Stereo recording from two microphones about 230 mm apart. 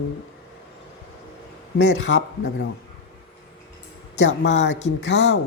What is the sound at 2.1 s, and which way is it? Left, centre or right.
Speech, left.